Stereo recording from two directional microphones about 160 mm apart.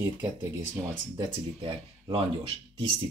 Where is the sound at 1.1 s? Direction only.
35° right (ahead or behind).